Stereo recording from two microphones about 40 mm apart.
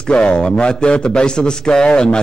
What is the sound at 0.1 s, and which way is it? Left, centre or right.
A man's voice, left.